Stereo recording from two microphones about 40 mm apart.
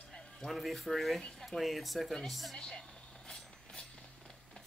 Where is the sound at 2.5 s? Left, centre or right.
Left.